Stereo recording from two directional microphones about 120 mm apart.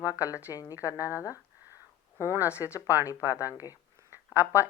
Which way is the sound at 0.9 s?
15° right (ahead or behind).